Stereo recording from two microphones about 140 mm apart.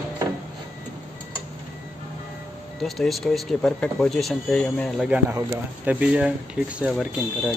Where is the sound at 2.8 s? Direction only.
Centre (ahead or behind).